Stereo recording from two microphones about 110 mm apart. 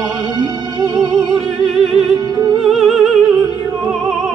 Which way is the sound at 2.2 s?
35° right (ahead or behind).